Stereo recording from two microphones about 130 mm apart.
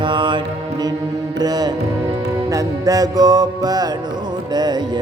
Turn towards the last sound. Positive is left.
turn(degrees=-30)  # may be behind; listen again after turning